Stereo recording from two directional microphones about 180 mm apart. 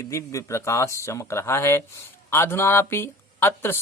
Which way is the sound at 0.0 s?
15° left (ahead or behind).